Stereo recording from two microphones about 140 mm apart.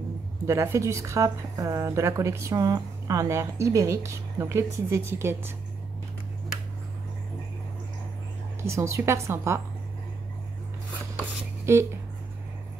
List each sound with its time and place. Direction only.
0.5 s a woman's voice: 20° right (ahead or behind)
8.6 s a woman's voice: 20° right (ahead or behind)
11.6 s speech: 20° right (ahead or behind)